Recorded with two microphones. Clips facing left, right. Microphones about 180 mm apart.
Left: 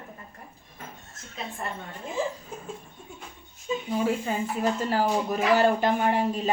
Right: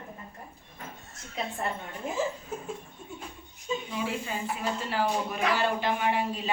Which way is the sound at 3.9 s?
45° left (ahead or behind).